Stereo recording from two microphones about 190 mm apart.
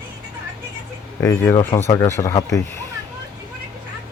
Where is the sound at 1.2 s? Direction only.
10° left (ahead or behind).